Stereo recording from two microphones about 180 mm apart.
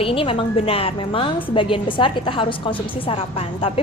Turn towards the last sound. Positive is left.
turn(degrees=30)  # may be behind; listen again after turning